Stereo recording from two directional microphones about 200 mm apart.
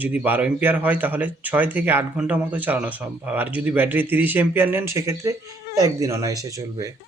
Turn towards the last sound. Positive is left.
turn(degrees=-15)  # may be behind; listen again after turning